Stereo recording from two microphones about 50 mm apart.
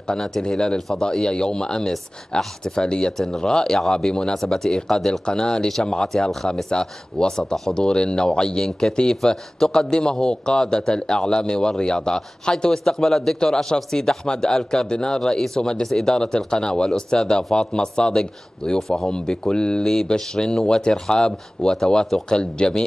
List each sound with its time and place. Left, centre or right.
0.1 s speech: centre
0.7 s a man's voice: centre